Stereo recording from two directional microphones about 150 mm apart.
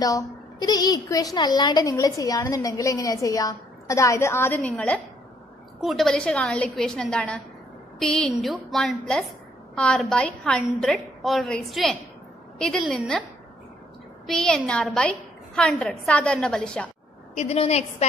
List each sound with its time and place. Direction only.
0.0 s a woman's voice: 25° left (ahead or behind); by 13.2 s centre (ahead or behind)
14.2 s a woman's voice: 5° left (ahead or behind)
17.4 s a woman's voice: 45° left (ahead or behind)